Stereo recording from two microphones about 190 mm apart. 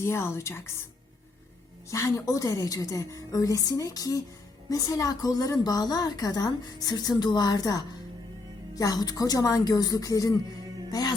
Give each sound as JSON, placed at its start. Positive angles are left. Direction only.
{"t": 0.0, "sound": "a woman's voice", "side_deg": 15}
{"t": 1.9, "sound": "a woman's voice", "side_deg": 15}